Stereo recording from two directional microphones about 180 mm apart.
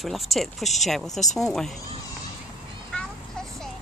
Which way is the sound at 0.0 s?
Centre (ahead or behind).